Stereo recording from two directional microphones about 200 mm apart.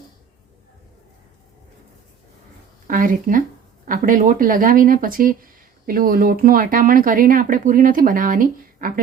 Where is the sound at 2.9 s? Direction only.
40° right (ahead or behind).